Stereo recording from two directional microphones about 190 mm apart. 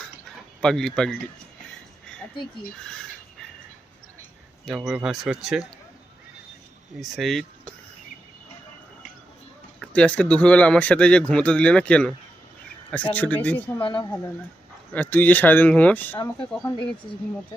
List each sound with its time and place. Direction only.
0.0 s drip: 5° left (ahead or behind)
4.6 s a man's voice: centre (ahead or behind)
7.0 s a man's voice: centre (ahead or behind)
9.8 s a man's voice: 5° left (ahead or behind)
13.7 s speech: 25° left (ahead or behind)
14.9 s speech: 10° left (ahead or behind)
16.6 s speech: 25° left (ahead or behind)